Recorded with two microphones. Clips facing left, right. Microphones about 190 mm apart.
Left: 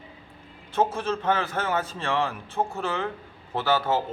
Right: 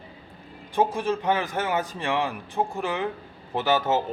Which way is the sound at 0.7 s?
15° right (ahead or behind).